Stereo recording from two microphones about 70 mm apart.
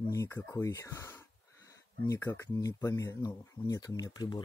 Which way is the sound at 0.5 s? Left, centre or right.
Left.